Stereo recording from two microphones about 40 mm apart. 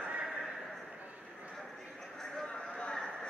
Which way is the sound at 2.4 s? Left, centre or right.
Left.